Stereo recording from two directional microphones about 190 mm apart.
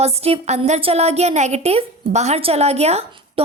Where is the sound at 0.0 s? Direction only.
30° right (ahead or behind).